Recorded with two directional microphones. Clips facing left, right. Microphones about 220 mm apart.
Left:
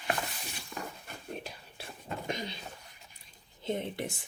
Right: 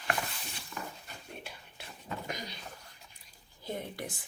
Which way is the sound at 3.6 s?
25° left (ahead or behind).